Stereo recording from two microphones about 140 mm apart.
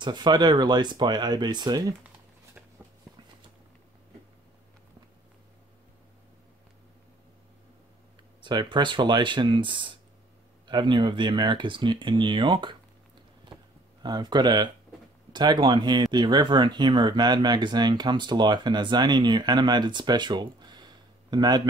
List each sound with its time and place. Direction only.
0.0 s speech: 30° right (ahead or behind)
8.4 s speech: 35° right (ahead or behind)
14.0 s speech: 30° right (ahead or behind)